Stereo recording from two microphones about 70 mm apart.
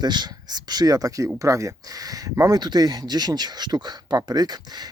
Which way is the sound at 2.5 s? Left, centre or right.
Right.